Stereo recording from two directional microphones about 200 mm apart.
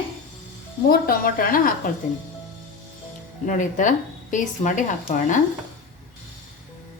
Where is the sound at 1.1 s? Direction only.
45° left (ahead or behind).